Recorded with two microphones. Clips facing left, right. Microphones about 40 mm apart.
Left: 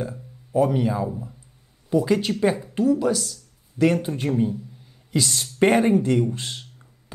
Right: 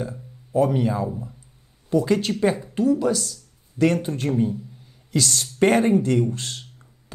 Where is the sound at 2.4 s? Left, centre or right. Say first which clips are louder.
Even; centre.